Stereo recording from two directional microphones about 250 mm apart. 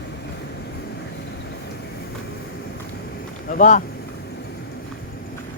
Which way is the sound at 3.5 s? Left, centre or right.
Left.